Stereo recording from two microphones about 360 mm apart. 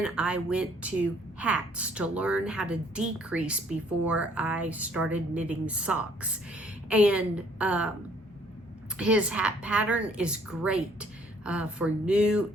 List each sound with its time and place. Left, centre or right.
0.0 s a woman's voice: centre
9.0 s a woman's voice: centre